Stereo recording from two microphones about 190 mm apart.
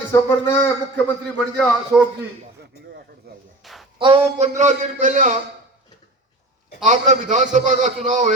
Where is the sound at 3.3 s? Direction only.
55° right (ahead or behind).